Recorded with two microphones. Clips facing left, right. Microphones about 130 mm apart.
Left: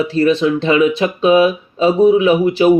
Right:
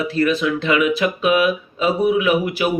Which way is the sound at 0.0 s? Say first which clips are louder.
Left 5 dB; 30° left (ahead or behind).